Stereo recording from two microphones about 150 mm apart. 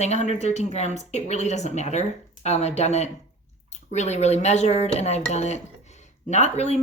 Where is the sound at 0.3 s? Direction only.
50° left (ahead or behind).